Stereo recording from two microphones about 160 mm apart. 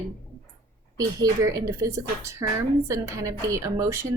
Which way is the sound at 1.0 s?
20° right (ahead or behind).